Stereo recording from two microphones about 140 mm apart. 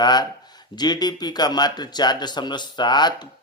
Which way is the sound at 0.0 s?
30° left (ahead or behind).